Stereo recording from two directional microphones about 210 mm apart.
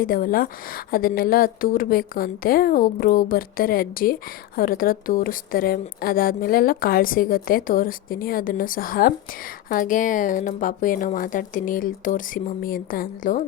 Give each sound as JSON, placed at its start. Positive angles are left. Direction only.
{"t": 0.0, "sound": "a woman's voice", "side_deg": 40}